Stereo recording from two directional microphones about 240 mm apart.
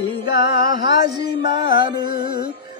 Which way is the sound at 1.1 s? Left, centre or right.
Centre.